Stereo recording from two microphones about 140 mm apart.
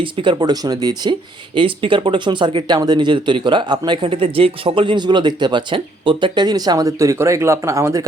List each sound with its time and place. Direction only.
0.0 s speech: 35° right (ahead or behind)